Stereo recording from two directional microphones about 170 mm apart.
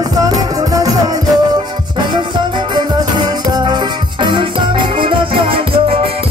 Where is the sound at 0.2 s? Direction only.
20° right (ahead or behind).